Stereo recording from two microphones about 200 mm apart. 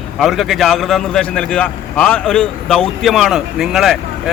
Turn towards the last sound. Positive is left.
turn(degrees=0)  # may be behind; listen again after turning